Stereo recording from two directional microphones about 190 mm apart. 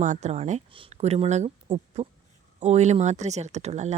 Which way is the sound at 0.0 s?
40° right (ahead or behind).